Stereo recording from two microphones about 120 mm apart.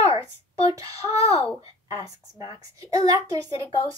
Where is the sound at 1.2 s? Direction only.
55° left (ahead or behind).